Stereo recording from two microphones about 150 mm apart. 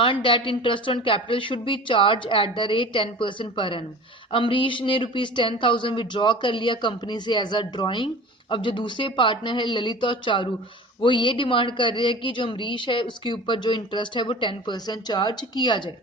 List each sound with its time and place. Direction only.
0.0 s speech: 35° left (ahead or behind)